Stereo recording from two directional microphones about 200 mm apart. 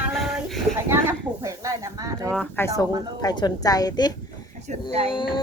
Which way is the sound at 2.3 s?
10° left (ahead or behind).